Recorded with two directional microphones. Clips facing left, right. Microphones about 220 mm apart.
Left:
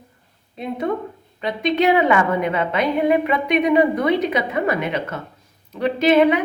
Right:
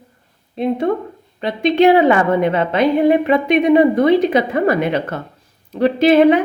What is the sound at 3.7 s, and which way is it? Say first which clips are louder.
A woman's voice: right 7 dB; 50° right (ahead or behind).